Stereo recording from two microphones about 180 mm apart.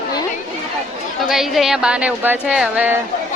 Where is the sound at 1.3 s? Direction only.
Centre (ahead or behind).